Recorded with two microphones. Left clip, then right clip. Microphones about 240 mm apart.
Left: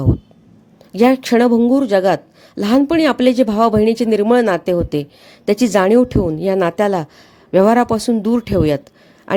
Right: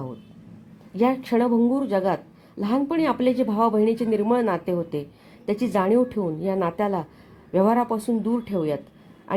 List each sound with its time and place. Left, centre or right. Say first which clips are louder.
0.9 s speech: left 9 dB; left